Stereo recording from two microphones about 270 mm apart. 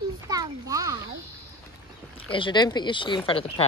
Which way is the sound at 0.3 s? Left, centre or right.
Centre.